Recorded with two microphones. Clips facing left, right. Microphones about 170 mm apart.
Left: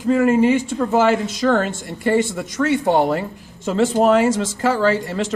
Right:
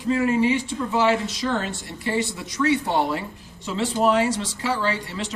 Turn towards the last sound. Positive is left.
turn(degrees=50)  # may be behind; listen again after turning